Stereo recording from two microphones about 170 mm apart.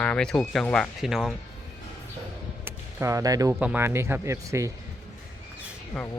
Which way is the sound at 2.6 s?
15° right (ahead or behind).